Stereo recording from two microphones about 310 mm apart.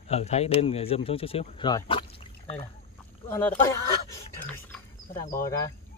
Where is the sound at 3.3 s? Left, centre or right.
Centre.